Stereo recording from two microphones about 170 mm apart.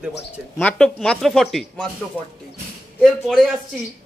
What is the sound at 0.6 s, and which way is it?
Speech, 10° left (ahead or behind).